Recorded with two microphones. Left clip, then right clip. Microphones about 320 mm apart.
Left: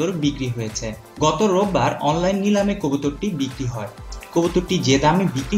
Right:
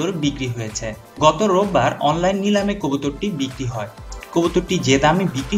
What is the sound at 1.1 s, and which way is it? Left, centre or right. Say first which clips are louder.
Speech: right 3 dB; right.